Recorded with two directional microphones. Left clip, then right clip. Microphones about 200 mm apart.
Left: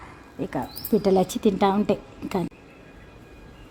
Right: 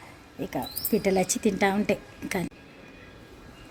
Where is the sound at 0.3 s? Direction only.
5° left (ahead or behind).